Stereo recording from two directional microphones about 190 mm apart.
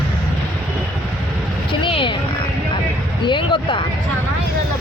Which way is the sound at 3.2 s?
25° left (ahead or behind).